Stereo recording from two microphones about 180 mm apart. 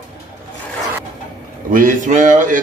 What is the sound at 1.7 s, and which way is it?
Speech, 50° right (ahead or behind).